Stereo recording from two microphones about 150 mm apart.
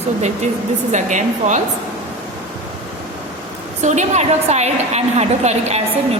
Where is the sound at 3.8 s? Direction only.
50° right (ahead or behind).